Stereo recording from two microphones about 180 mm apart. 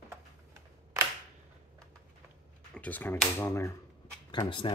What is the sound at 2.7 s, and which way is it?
Speech, 10° left (ahead or behind).